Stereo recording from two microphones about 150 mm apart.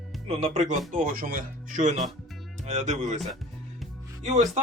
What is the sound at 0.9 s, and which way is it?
Speech, 70° right (ahead or behind).